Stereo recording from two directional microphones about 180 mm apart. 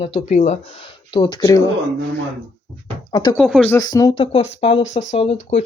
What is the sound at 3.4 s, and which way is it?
Speech, centre (ahead or behind).